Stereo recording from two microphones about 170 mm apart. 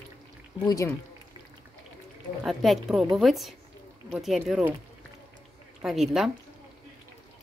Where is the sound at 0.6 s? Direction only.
25° left (ahead or behind).